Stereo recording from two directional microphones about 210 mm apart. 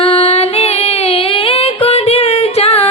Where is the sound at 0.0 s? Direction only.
30° left (ahead or behind).